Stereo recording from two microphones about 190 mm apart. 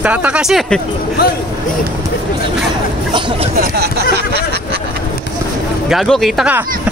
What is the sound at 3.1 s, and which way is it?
Speech, 25° right (ahead or behind).